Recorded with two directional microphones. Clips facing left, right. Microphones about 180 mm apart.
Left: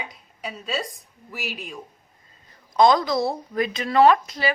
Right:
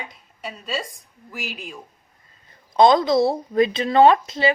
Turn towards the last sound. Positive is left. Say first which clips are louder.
# right 2 dB
turn(degrees=-25)  # may be behind; listen again after turning